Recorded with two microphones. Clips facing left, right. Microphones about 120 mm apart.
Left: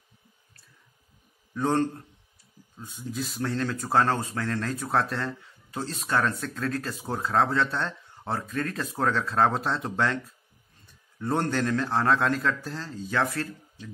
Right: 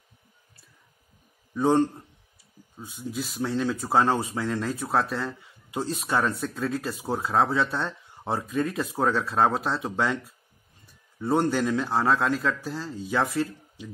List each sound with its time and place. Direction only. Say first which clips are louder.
1.5 s speech: right 4 dB; 10° right (ahead or behind)
11.1 s speech: right 3 dB; 5° right (ahead or behind)